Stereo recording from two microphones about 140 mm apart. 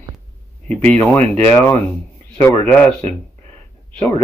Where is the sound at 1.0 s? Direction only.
10° left (ahead or behind).